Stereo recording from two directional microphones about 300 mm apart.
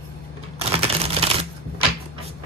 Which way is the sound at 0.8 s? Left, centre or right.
Centre.